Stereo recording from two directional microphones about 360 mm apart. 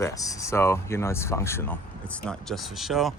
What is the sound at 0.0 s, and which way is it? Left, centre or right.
Speech, centre.